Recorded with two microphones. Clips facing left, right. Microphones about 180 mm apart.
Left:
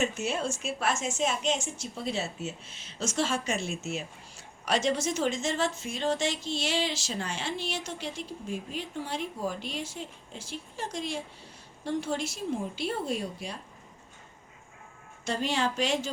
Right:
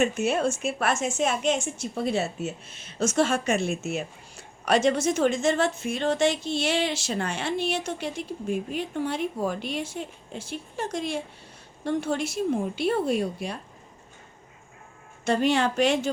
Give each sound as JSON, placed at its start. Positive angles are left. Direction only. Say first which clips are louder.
{"t": 0.0, "sound": "a woman's voice", "louder": "right 6 dB", "side_deg": -55}
{"t": 15.2, "sound": "a woman's voice", "louder": "right 7 dB", "side_deg": -60}